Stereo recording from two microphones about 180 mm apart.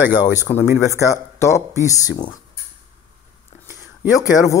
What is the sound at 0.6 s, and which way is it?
Speech, 15° right (ahead or behind).